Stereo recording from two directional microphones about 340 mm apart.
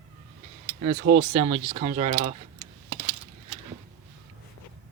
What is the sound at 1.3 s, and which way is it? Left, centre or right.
Speech, centre.